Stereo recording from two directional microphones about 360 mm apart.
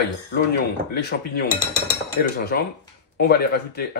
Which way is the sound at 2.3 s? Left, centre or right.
Left.